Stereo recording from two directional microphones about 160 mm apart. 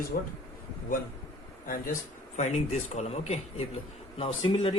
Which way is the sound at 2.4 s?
45° left (ahead or behind).